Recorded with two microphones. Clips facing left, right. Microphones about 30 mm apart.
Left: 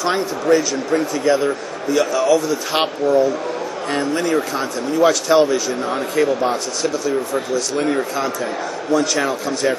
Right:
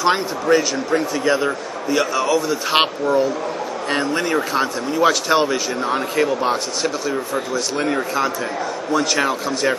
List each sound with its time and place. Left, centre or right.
0.0 s speech: centre
2.7 s speech: right
4.9 s speech: centre
6.8 s speech: centre